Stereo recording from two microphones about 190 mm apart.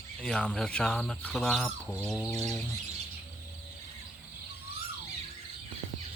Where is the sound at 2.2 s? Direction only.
15° left (ahead or behind).